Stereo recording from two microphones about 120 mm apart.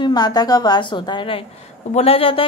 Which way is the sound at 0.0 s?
35° left (ahead or behind).